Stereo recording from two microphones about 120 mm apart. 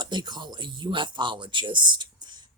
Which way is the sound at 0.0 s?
40° right (ahead or behind).